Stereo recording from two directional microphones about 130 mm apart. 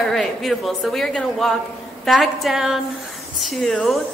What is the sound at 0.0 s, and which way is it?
A woman's voice, centre (ahead or behind).